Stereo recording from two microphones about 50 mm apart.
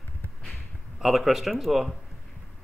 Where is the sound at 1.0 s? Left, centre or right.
Centre.